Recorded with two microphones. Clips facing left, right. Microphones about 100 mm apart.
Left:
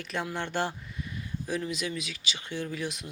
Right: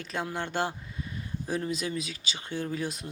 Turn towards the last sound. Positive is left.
turn(degrees=-40)  # may be behind; listen again after turning